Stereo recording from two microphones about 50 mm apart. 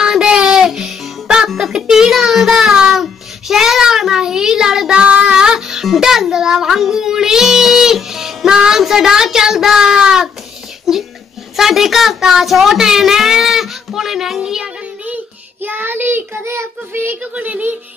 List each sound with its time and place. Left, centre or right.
0.0 s music: centre
1.5 s child singing: centre
11.5 s speech: centre
15.6 s child singing: right
17.1 s speech: right